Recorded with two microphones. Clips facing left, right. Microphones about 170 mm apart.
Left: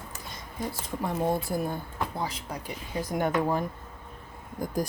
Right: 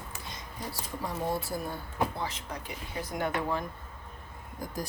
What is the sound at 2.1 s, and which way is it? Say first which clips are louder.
Speech: left 3 dB; 35° left (ahead or behind).